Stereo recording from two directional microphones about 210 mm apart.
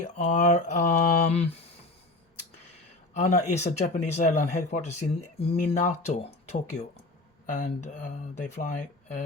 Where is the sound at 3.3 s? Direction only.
30° left (ahead or behind).